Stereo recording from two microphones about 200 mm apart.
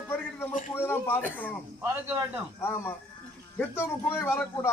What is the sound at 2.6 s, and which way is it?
A man's voice, 10° left (ahead or behind).